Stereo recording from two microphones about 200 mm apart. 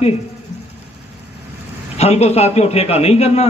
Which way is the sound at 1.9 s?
30° left (ahead or behind).